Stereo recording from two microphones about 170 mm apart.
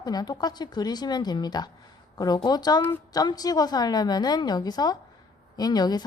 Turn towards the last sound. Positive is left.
turn(degrees=25)  # may be behind; listen again after turning